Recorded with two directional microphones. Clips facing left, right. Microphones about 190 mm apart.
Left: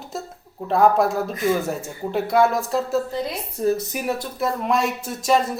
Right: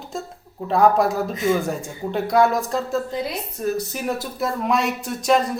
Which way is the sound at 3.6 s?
25° left (ahead or behind).